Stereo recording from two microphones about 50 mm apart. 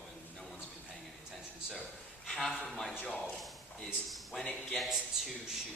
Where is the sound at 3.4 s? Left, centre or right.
Centre.